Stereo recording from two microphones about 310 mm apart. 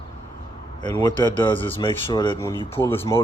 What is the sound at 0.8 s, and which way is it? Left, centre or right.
Speech, centre.